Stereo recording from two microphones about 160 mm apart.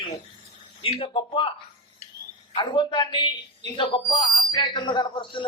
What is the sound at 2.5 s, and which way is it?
Speech, 30° left (ahead or behind).